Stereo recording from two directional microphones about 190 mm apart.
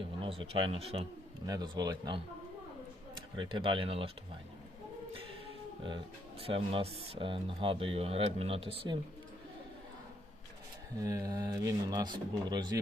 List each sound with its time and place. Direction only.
0.3 s speech: 30° right (ahead or behind)
1.5 s speech: 20° right (ahead or behind)
3.3 s speech: 25° right (ahead or behind)
6.4 s speech: 30° right (ahead or behind)
10.9 s speech: 20° right (ahead or behind)